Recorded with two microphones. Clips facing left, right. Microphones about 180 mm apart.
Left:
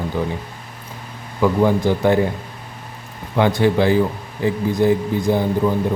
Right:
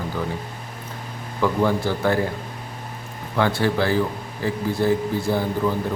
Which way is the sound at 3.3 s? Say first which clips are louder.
Left 5 dB; 20° left (ahead or behind).